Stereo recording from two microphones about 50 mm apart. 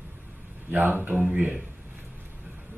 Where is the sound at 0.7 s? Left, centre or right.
Right.